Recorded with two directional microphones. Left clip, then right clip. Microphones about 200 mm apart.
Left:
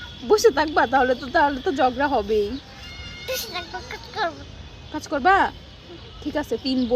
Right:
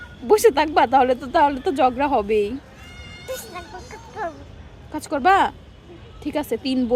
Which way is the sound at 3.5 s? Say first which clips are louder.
Left 4 dB; 5° right (ahead or behind).